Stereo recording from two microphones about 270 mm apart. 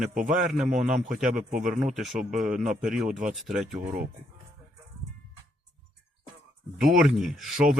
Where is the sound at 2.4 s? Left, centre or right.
Right.